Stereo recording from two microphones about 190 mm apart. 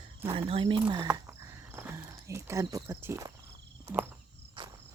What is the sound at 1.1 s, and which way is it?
Speech, 15° right (ahead or behind).